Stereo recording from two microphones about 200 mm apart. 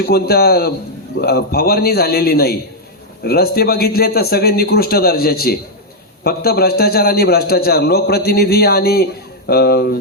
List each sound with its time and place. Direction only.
0.0 s a man's voice: 50° left (ahead or behind)